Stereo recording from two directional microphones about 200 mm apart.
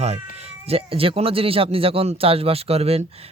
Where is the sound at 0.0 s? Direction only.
30° right (ahead or behind).